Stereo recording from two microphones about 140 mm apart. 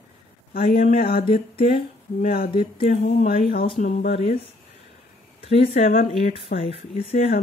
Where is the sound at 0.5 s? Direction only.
90° left.